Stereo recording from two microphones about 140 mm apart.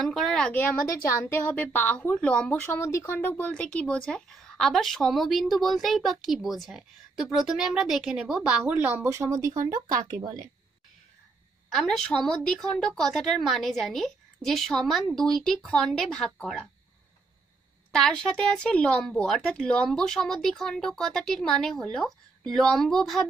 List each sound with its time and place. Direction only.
0.0 s a sound: 5° left (ahead or behind)
0.8 s a woman's voice: 20° left (ahead or behind); by 10.0 s 30° right (ahead or behind)
11.7 s speech: 5° left (ahead or behind)
17.9 s speech: 5° left (ahead or behind)